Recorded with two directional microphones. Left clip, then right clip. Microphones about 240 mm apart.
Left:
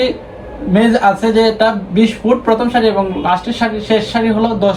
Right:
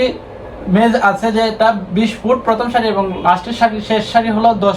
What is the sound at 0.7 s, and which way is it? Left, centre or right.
Speech, centre.